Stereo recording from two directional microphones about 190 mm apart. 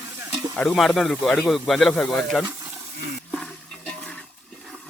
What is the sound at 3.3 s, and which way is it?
Toilet flush, 5° left (ahead or behind).